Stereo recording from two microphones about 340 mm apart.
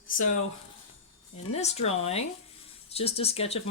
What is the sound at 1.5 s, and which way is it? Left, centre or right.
Speech, centre.